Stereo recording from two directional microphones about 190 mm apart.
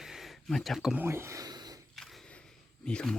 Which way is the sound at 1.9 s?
Centre (ahead or behind).